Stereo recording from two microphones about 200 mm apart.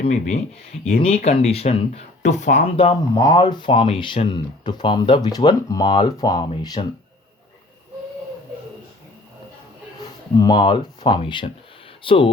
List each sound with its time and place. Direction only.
0.9 s speech: 35° left (ahead or behind)
3.2 s speech: 20° left (ahead or behind)
10.3 s speech: 20° left (ahead or behind)